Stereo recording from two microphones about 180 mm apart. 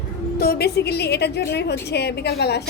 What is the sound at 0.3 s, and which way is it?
A woman's voice, 60° left (ahead or behind).